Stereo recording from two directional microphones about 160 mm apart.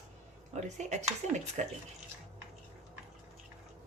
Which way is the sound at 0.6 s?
45° right (ahead or behind).